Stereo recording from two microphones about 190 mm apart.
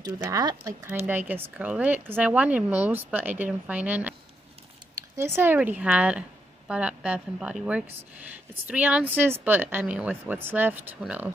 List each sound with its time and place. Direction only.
0.0 s speech: 20° right (ahead or behind)
5.1 s a woman's voice: 15° right (ahead or behind)